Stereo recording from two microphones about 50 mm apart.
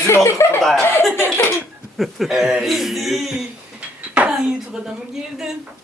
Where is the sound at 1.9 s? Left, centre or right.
Centre.